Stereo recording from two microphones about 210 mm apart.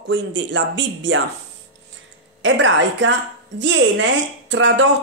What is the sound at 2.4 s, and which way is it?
Speech, 60° right (ahead or behind).